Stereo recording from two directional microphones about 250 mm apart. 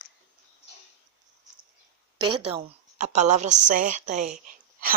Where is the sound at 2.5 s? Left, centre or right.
Right.